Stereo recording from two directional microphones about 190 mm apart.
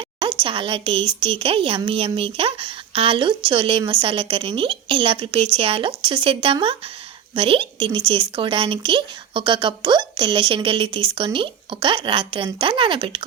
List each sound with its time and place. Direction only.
0.4 s speech: 30° right (ahead or behind)